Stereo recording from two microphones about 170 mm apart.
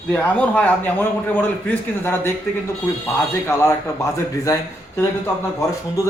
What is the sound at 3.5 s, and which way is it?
Speech, 15° left (ahead or behind).